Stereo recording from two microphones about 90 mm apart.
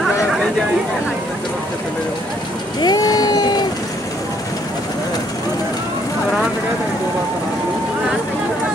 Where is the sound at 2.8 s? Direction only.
45° left (ahead or behind).